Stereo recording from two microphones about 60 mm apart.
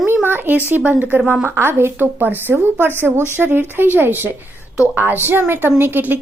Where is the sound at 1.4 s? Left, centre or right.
Right.